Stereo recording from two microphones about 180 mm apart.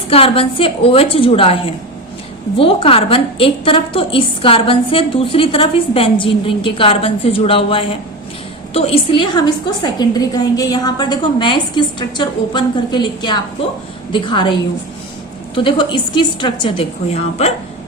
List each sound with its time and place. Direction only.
0.1 s a woman's voice: 30° left (ahead or behind)